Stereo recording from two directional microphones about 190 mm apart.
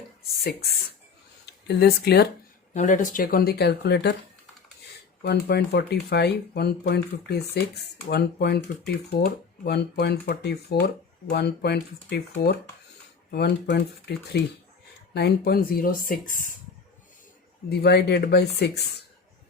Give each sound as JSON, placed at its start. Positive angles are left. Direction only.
{"t": 1.6, "sound": "speech", "side_deg": 60}
{"t": 2.7, "sound": "speech", "side_deg": 40}
{"t": 5.2, "sound": "speech", "side_deg": 60}
{"t": 17.7, "sound": "speech", "side_deg": 55}